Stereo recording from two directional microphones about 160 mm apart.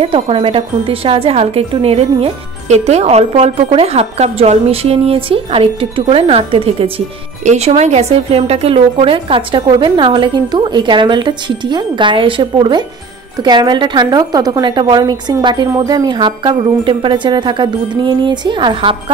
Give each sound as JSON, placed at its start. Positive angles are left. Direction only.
{"t": 0.0, "sound": "a woman's voice", "side_deg": -35}